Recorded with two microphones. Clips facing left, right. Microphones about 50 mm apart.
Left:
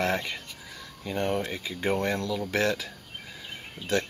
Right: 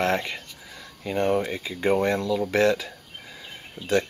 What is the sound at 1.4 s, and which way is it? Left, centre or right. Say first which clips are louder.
Speech: right 3 dB; centre.